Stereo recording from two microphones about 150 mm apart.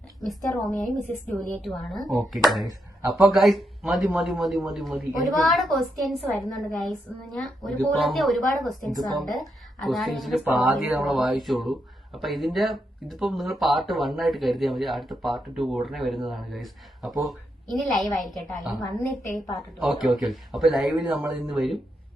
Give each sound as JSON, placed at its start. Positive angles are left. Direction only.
{"t": 0.3, "sound": "speech", "side_deg": 0}
{"t": 2.6, "sound": "speech", "side_deg": -20}
{"t": 3.2, "sound": "speech", "side_deg": 0}